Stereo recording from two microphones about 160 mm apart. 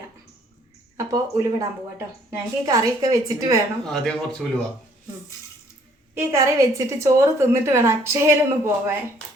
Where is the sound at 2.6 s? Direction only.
20° right (ahead or behind).